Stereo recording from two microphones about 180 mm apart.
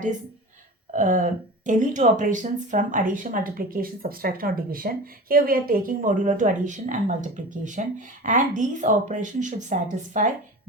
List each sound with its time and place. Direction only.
0.9 s speech: 45° right (ahead or behind)